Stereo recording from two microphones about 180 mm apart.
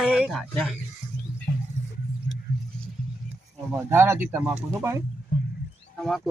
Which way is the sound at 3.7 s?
10° right (ahead or behind).